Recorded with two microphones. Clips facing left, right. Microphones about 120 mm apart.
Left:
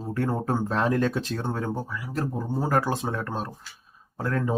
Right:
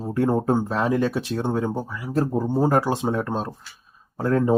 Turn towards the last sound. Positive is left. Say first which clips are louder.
# right 7 dB
turn(degrees=-30)  # may be behind; listen again after turning